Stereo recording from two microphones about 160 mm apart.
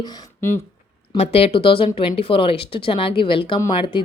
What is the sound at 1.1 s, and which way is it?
Speech, 40° left (ahead or behind).